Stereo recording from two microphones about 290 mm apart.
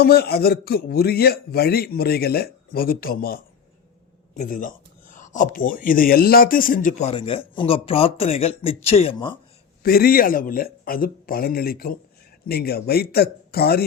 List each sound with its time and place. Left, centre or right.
0.0 s a man's voice: left; by 9.4 s centre
9.8 s a man's voice: left